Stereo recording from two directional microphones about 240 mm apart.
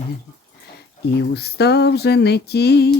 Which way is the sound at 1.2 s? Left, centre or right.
Left.